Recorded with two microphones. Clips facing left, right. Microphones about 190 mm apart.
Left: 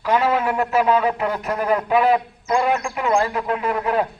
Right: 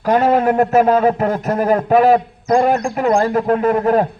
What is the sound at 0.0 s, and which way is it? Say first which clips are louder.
A man's voice: right 5 dB; 45° right (ahead or behind).